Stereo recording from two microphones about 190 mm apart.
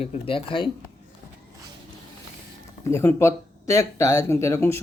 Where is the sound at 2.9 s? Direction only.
15° left (ahead or behind).